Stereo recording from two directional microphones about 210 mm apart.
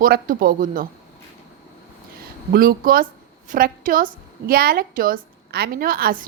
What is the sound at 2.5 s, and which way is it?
A woman's voice, 45° right (ahead or behind).